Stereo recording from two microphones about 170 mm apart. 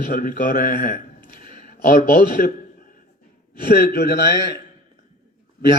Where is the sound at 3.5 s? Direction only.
60° left (ahead or behind).